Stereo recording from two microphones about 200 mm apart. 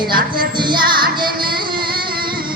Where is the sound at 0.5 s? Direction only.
25° right (ahead or behind).